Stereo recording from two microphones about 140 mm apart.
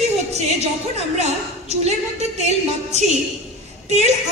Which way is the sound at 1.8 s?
50° right (ahead or behind).